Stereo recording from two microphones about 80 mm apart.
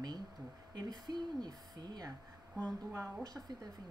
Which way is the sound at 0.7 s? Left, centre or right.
Right.